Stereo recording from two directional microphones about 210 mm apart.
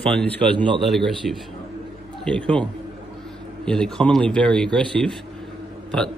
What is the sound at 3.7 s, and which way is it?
A man's voice, 5° left (ahead or behind).